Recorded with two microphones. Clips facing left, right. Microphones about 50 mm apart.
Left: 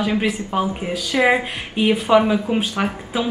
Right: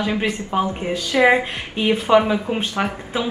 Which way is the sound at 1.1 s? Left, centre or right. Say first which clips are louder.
Right 2 dB; right.